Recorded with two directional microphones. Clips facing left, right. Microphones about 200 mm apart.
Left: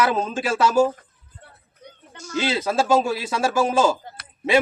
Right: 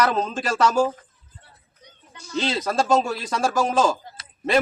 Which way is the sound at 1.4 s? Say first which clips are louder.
Left 10 dB; 55° left (ahead or behind).